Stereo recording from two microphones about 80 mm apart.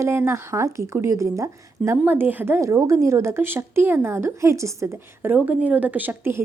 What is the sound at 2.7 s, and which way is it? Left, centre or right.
A woman's voice, right.